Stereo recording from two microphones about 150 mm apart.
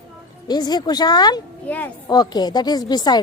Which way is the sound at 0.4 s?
30° left (ahead or behind).